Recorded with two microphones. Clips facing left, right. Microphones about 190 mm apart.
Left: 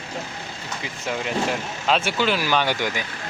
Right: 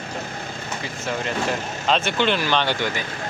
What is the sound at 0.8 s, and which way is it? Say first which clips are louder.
Speech: even; 10° left (ahead or behind).